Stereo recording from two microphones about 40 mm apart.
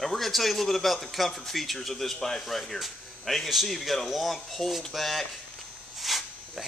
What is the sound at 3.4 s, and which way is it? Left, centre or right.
A man's voice, centre.